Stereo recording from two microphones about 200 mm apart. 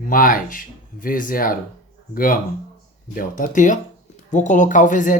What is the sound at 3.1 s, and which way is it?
Speech, 45° left (ahead or behind).